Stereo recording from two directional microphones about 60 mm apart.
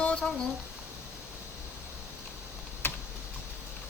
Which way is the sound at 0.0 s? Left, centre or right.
Centre.